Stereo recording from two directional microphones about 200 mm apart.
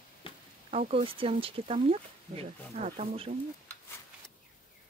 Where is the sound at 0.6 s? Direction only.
30° right (ahead or behind).